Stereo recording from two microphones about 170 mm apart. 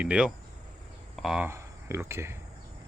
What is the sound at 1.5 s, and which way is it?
Speech, 15° right (ahead or behind).